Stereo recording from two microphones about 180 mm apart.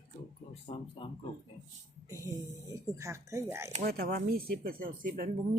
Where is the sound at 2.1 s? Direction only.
15° right (ahead or behind).